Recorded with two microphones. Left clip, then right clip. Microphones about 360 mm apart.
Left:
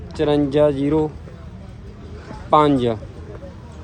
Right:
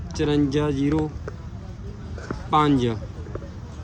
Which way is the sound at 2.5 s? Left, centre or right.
Centre.